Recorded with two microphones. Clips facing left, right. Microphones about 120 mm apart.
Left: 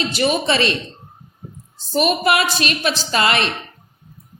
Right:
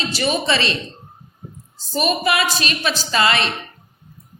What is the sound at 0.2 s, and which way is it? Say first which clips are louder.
Speech: left 2 dB; 40° left (ahead or behind).